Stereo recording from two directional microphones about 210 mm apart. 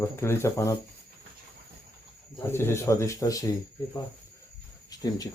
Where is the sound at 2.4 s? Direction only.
10° left (ahead or behind).